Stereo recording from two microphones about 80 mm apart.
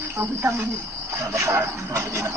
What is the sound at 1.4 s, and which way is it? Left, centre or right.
Speech, right.